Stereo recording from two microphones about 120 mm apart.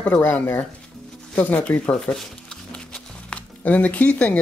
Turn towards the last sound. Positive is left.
turn(degrees=10)  # may be behind; listen again after turning